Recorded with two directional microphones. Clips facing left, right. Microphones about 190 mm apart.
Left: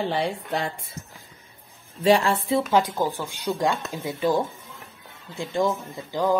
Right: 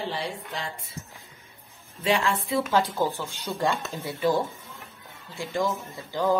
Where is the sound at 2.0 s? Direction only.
40° left (ahead or behind).